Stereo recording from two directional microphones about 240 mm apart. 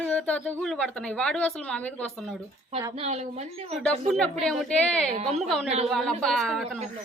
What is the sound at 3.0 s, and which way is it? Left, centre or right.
Speech, right.